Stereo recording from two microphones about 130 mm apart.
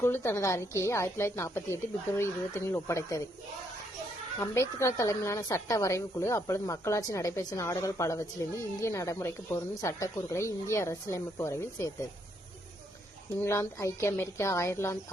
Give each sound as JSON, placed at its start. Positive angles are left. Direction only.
{"t": 0.0, "sound": "a woman's voice", "side_deg": 20}
{"t": 4.4, "sound": "a woman's voice", "side_deg": 20}
{"t": 13.4, "sound": "a woman's voice", "side_deg": 20}